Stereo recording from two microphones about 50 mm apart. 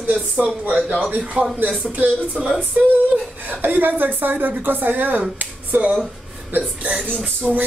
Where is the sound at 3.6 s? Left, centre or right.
Right.